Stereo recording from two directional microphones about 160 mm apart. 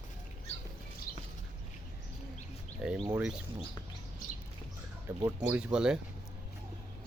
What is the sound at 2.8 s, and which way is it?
Speech, 5° right (ahead or behind).